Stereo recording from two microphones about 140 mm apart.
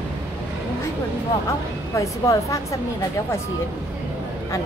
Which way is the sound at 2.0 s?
20° left (ahead or behind).